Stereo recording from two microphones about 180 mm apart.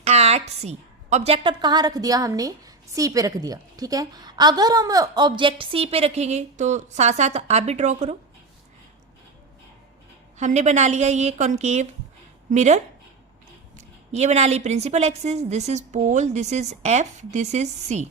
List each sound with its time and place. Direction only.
0.0 s a woman's voice: 35° right (ahead or behind)
10.3 s a woman's voice: 40° right (ahead or behind)
14.1 s a woman's voice: 40° right (ahead or behind)